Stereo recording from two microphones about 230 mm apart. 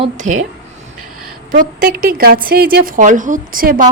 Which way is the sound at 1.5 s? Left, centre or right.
Right.